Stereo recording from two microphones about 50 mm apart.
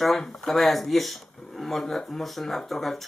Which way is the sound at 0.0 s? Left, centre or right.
Centre.